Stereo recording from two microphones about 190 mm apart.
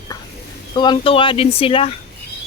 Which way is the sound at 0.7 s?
25° left (ahead or behind).